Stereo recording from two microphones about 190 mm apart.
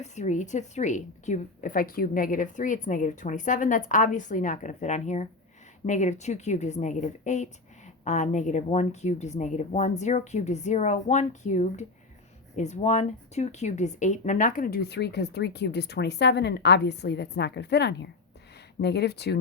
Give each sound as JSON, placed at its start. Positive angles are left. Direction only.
{"t": 0.0, "sound": "a woman's voice", "side_deg": 40}